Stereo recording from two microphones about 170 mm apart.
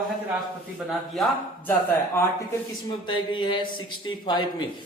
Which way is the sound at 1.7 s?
10° left (ahead or behind).